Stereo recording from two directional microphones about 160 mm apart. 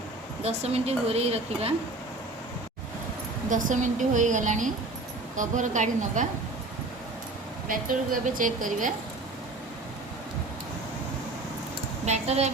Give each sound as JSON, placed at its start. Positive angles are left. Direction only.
{"t": 0.4, "sound": "a woman's voice", "side_deg": -40}
{"t": 3.5, "sound": "a woman's voice", "side_deg": -50}
{"t": 7.7, "sound": "a woman's voice", "side_deg": -55}
{"t": 12.0, "sound": "a woman's voice", "side_deg": -45}